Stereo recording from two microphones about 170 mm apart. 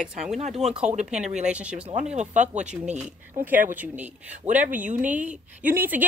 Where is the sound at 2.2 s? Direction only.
45° right (ahead or behind).